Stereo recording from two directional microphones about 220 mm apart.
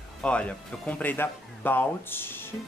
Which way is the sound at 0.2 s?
5° left (ahead or behind).